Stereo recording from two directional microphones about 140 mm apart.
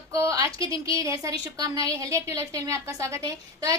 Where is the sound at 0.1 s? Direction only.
20° right (ahead or behind).